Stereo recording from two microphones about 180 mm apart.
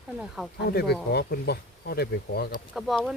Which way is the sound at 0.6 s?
65° left (ahead or behind).